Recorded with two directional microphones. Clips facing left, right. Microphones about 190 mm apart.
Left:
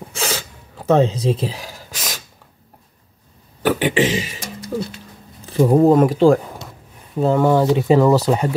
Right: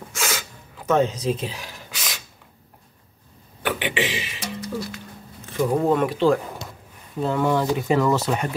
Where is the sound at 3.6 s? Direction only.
40° left (ahead or behind).